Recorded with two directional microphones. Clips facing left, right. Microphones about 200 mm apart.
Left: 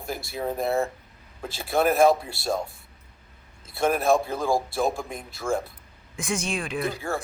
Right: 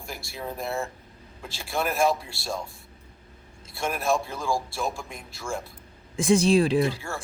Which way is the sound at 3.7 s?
55° left (ahead or behind).